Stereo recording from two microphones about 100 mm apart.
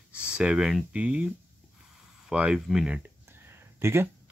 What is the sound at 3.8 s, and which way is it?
Speech, 25° right (ahead or behind).